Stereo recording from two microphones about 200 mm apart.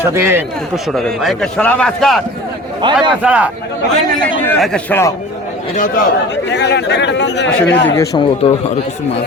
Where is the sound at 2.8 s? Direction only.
25° right (ahead or behind).